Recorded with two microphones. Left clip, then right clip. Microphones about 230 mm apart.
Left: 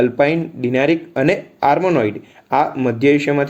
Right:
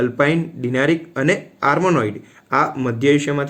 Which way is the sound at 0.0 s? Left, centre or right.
Centre.